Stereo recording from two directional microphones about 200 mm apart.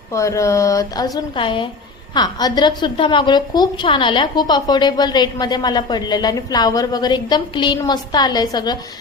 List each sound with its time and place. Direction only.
0.1 s a woman's voice: 15° left (ahead or behind)